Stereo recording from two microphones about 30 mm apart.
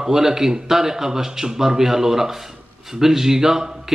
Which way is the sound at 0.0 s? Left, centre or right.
Centre.